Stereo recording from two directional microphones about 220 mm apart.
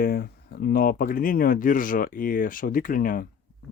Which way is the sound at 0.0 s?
40° left (ahead or behind).